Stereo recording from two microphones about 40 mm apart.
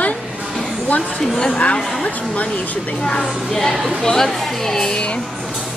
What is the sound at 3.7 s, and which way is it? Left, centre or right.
Speech, right.